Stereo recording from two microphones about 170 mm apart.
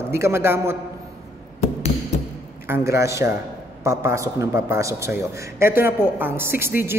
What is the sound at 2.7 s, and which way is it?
A man's voice, 15° right (ahead or behind).